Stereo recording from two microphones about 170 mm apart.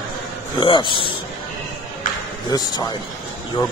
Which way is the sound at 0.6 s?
30° left (ahead or behind).